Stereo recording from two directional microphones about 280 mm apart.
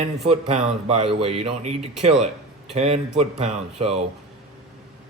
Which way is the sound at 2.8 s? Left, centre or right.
Right.